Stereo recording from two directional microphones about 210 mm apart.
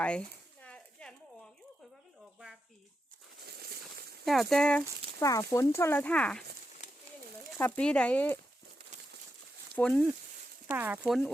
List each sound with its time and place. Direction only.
0.0 s a sound: 5° left (ahead or behind)
3.4 s a sound: 50° right (ahead or behind)
4.3 s speech: centre (ahead or behind)
5.2 s speech: 15° left (ahead or behind)
7.6 s speech: 5° left (ahead or behind)
9.7 s speech: 5° left (ahead or behind)
10.7 s speech: 10° right (ahead or behind)